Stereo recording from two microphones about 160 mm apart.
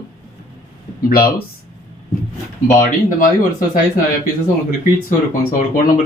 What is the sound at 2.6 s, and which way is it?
Speech, 55° left (ahead or behind).